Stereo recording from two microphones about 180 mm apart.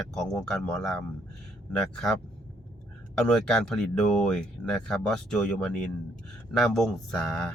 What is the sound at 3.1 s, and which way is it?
Speech, 5° left (ahead or behind).